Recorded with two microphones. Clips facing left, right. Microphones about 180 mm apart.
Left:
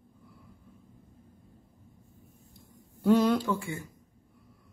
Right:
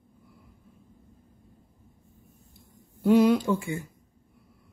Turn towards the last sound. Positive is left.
turn(degrees=-15)  # may be behind; listen again after turning